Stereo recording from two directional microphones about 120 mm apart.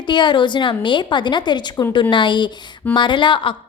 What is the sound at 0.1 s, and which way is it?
A woman's voice, 40° left (ahead or behind).